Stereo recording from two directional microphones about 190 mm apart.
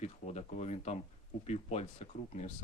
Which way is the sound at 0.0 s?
35° left (ahead or behind).